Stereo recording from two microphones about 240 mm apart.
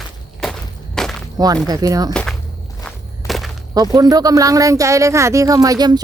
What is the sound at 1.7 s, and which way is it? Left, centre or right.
Speech, centre.